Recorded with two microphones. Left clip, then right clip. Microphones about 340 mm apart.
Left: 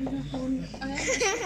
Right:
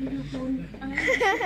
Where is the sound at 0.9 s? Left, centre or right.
Right.